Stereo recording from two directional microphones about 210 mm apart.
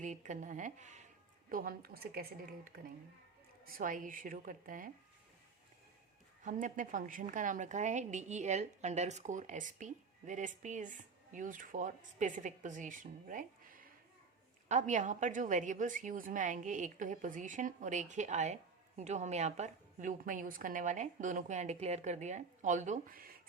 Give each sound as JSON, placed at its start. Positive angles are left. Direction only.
{"t": 0.0, "sound": "a woman's voice", "side_deg": -35}
{"t": 3.7, "sound": "a woman's voice", "side_deg": -40}
{"t": 6.4, "sound": "a woman's voice", "side_deg": -40}